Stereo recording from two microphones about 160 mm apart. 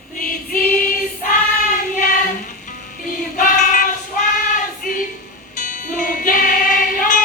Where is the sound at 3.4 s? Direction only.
55° left (ahead or behind).